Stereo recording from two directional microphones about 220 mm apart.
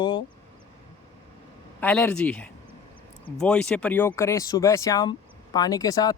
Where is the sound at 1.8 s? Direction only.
5° left (ahead or behind).